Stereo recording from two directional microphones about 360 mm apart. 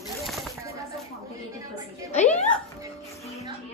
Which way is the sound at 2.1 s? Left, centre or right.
Centre.